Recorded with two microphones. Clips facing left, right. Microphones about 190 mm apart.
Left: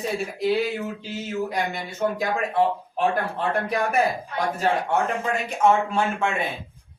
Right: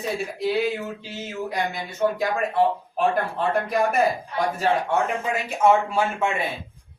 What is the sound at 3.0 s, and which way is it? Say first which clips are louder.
Speech: right 1 dB; centre (ahead or behind).